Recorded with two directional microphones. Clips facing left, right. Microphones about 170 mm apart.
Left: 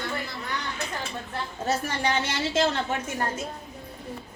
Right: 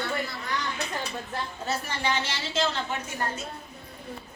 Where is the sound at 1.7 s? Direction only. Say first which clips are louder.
Left 4 dB; 45° left (ahead or behind).